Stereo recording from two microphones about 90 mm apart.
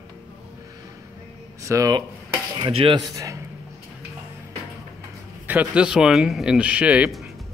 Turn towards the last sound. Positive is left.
turn(degrees=-15)  # may be behind; listen again after turning